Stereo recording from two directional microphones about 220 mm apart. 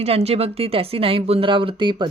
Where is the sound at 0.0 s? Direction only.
30° right (ahead or behind).